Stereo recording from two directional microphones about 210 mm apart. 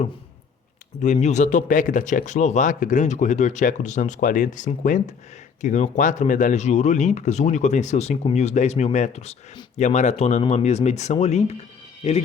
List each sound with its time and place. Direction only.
1.0 s speech: 35° left (ahead or behind)